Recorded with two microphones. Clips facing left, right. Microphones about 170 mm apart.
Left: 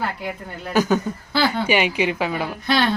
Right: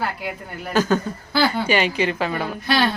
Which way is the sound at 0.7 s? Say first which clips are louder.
Left 1 dB; 15° left (ahead or behind).